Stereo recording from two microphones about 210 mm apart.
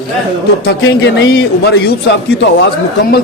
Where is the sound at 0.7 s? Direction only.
55° left (ahead or behind).